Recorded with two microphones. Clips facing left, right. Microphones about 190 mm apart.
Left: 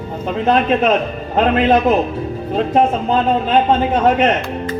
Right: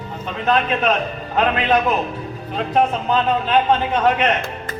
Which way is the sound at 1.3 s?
50° left (ahead or behind).